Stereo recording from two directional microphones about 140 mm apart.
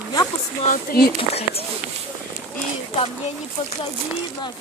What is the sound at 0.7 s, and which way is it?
Speech, 90° left.